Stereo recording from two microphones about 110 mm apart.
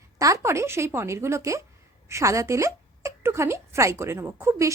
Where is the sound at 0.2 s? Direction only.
30° right (ahead or behind).